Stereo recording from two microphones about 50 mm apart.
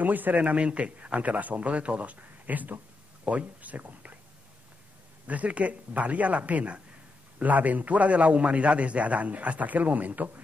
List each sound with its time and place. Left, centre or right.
0.0 s a man's voice: right
5.2 s a man's voice: right